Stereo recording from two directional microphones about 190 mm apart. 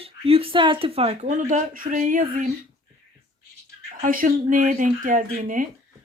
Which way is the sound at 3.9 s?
45° right (ahead or behind).